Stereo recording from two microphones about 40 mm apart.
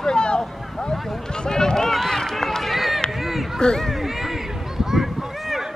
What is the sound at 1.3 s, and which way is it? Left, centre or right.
Run, centre.